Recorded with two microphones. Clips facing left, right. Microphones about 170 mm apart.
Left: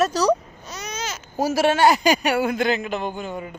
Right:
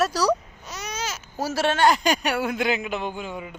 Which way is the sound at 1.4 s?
10° left (ahead or behind).